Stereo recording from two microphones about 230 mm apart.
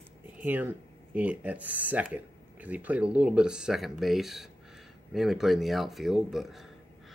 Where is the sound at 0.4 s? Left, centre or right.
Centre.